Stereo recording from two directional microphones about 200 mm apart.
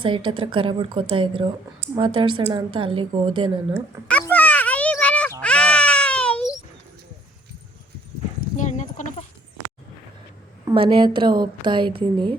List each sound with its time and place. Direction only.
0.3 s a woman's voice: 25° right (ahead or behind)
4.1 s a sound: 10° left (ahead or behind)
5.4 s cat: 5° left (ahead or behind)
8.5 s horse: 35° left (ahead or behind)
10.7 s a woman's voice: 25° right (ahead or behind)